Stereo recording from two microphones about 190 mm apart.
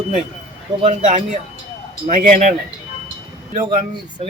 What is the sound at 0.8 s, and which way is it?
Speech, 35° right (ahead or behind).